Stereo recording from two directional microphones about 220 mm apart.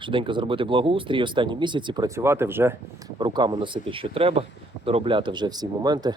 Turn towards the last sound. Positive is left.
turn(degrees=-20)  # may be behind; listen again after turning